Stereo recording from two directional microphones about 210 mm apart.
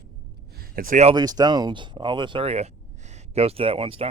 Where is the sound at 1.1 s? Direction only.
20° right (ahead or behind).